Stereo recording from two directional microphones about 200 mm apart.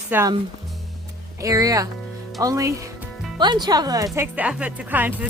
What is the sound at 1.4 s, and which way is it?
Speech, 15° right (ahead or behind).